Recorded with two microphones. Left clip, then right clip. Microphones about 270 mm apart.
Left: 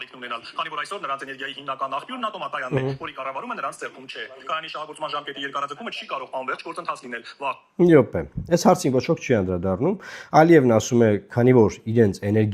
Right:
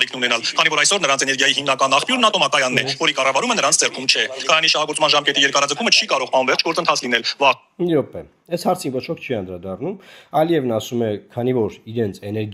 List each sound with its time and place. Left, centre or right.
0.0 s a man's voice: right
7.8 s speech: left